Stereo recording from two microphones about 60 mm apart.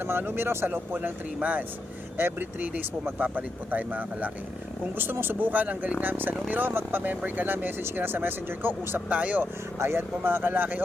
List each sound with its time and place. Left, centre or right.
0.1 s speech: right
2.1 s speech: right
9.7 s speech: right